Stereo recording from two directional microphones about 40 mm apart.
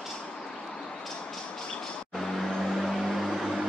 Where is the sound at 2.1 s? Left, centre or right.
Centre.